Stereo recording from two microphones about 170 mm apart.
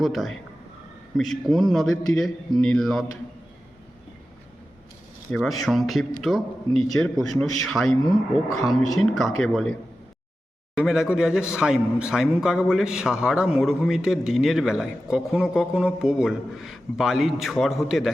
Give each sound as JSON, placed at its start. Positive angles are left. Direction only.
{"t": 0.0, "sound": "a man's voice", "side_deg": 0}
{"t": 5.3, "sound": "a man's voice", "side_deg": 0}
{"t": 10.8, "sound": "a man's voice", "side_deg": -5}